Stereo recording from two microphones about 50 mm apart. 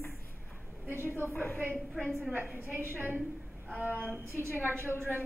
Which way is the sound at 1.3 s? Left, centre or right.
Left.